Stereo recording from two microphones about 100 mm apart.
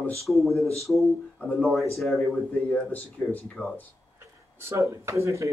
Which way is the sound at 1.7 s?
Centre (ahead or behind).